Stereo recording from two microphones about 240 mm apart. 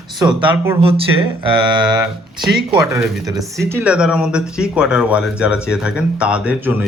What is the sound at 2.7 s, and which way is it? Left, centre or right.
Speech, centre.